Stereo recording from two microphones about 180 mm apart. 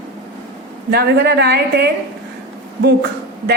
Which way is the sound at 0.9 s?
65° right (ahead or behind).